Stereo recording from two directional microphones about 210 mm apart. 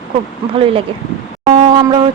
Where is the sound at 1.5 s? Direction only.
20° right (ahead or behind).